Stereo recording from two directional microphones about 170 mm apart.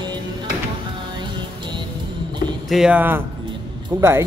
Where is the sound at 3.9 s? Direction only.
20° right (ahead or behind).